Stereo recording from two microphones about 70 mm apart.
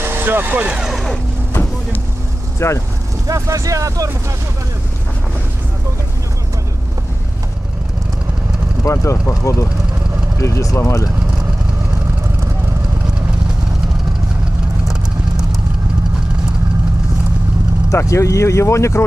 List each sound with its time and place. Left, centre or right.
0.0 s speech: right
0.7 s speech: centre
0.9 s vehicle: centre
2.6 s speech: left
3.3 s speech: right
8.8 s speech: left
17.9 s speech: left